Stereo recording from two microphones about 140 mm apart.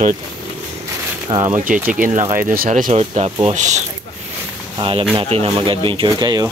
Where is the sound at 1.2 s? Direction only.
35° right (ahead or behind).